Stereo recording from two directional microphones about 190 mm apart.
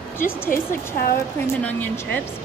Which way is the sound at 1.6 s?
10° left (ahead or behind).